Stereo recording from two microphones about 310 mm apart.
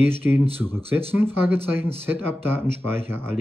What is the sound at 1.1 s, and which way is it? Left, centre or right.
Speech, centre.